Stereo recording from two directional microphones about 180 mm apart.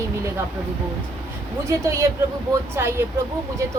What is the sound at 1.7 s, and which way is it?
A woman's voice, 15° right (ahead or behind).